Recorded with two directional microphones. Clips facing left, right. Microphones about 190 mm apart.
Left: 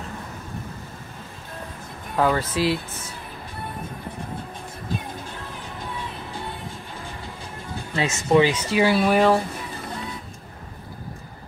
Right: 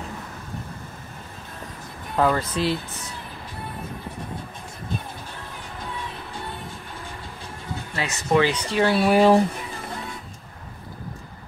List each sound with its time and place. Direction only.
2.1 s speech: centre (ahead or behind)
7.9 s speech: 20° left (ahead or behind)
8.5 s speech: 10° left (ahead or behind)